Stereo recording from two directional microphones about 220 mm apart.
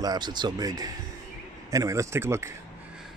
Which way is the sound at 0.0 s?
20° right (ahead or behind).